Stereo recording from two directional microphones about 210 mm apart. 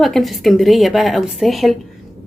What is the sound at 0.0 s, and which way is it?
Speech, centre (ahead or behind).